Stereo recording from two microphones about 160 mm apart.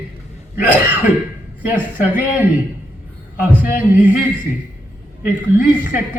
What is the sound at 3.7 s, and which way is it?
A woman's voice, 55° left (ahead or behind).